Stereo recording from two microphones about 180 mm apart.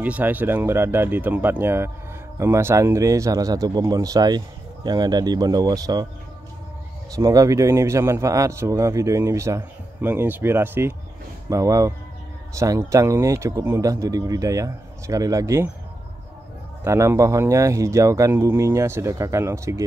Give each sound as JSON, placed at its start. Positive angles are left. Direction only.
{"t": 0.0, "sound": "speech", "side_deg": -10}
{"t": 7.2, "sound": "speech", "side_deg": -20}
{"t": 16.8, "sound": "speech", "side_deg": -15}